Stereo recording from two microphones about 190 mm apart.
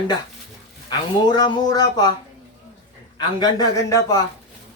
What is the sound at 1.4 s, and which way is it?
Speech, 20° left (ahead or behind).